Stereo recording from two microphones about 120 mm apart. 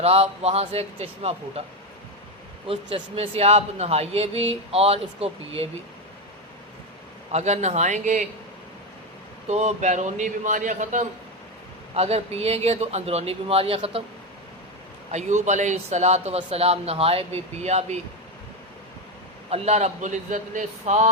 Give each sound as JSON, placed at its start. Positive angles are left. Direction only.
{"t": 0.0, "sound": "speech", "side_deg": -60}
{"t": 2.6, "sound": "speech", "side_deg": -55}
{"t": 7.3, "sound": "a man's voice", "side_deg": -70}
{"t": 9.5, "sound": "a man's voice", "side_deg": -70}
{"t": 11.9, "sound": "speech", "side_deg": -60}
{"t": 15.1, "sound": "speech", "side_deg": -75}
{"t": 19.5, "sound": "a man's voice", "side_deg": -60}